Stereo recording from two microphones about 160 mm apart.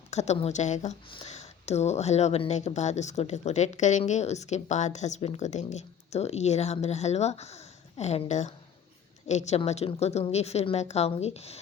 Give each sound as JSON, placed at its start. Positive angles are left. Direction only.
{"t": 0.1, "sound": "a woman's voice", "side_deg": 45}